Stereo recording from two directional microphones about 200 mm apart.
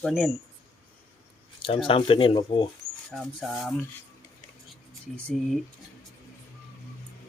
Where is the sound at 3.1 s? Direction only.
Centre (ahead or behind).